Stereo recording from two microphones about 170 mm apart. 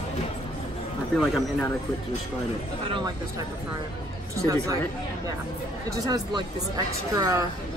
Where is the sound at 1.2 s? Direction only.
Centre (ahead or behind).